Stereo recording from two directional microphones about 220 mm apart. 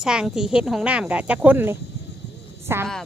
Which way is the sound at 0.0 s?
5° right (ahead or behind).